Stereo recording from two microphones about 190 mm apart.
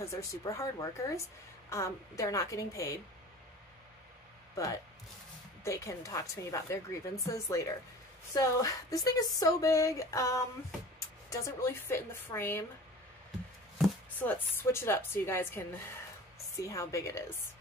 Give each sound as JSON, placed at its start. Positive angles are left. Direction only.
{"t": 0.0, "sound": "speech", "side_deg": 15}
{"t": 5.6, "sound": "speech", "side_deg": 15}
{"t": 13.7, "sound": "speech", "side_deg": 10}
{"t": 16.6, "sound": "speech", "side_deg": 15}